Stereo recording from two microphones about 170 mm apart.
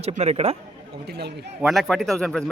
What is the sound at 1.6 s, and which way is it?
Speech, centre (ahead or behind).